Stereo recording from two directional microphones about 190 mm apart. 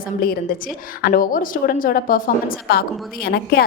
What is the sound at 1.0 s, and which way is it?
A woman's voice, 50° left (ahead or behind).